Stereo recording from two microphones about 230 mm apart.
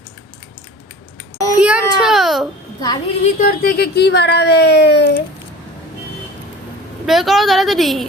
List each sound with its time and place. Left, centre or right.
1.6 s a sound: centre
2.8 s a woman's voice: centre
3.3 s speech: left
7.0 s a woman's voice: centre